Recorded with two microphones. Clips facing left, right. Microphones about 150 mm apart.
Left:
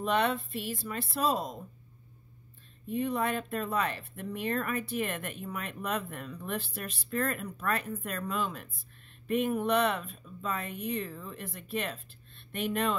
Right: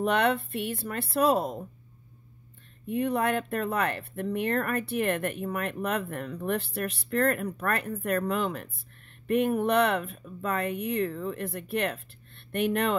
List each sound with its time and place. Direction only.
0.0 s speech: 65° right (ahead or behind)
2.9 s speech: 65° right (ahead or behind)